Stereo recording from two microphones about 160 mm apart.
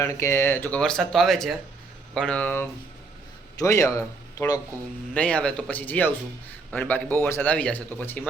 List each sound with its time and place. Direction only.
0.0 s speech: 15° left (ahead or behind)
3.6 s speech: 20° left (ahead or behind)
5.1 s speech: 5° left (ahead or behind)